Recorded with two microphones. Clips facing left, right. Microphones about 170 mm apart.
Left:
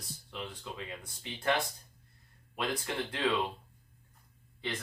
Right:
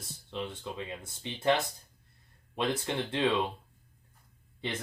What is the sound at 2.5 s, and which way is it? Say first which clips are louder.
Speech: right 4 dB; 25° right (ahead or behind).